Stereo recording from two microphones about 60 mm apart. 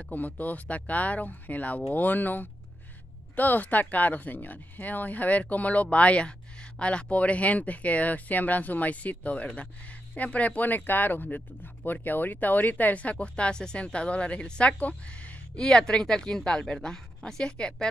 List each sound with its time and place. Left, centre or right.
0.1 s speech: left
15.6 s speech: centre